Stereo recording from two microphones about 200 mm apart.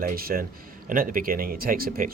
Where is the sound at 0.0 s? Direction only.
45° right (ahead or behind).